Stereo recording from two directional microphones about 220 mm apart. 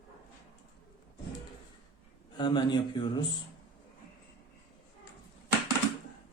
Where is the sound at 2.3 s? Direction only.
20° left (ahead or behind).